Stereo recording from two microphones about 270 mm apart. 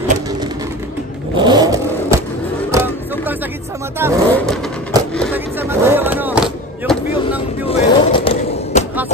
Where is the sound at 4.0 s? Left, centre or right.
Centre.